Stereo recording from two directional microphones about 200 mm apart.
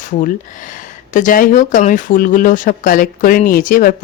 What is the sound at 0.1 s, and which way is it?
Speech, 40° left (ahead or behind).